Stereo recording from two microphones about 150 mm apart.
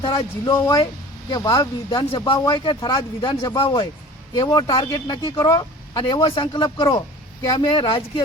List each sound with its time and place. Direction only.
0.0 s speech: 30° left (ahead or behind)